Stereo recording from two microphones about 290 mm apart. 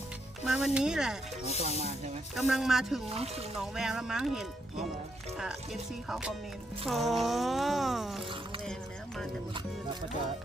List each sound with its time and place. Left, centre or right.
0.4 s speech: centre
2.3 s speech: centre
3.1 s speech: right
3.6 s speech: centre